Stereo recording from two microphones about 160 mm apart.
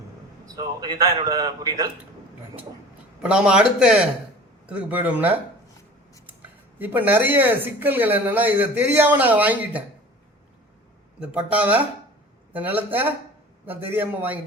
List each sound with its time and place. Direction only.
0.4 s a man's voice: 25° right (ahead or behind)
3.2 s a man's voice: 5° right (ahead or behind)
6.7 s speech: 10° right (ahead or behind)
11.2 s speech: 10° right (ahead or behind)